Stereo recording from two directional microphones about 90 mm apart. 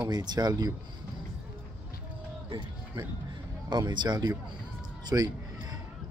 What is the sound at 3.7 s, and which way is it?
Speech, 55° right (ahead or behind).